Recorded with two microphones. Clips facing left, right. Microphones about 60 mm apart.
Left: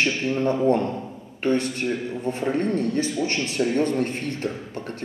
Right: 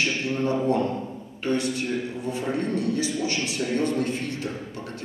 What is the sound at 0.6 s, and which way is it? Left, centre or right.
A man's voice, left.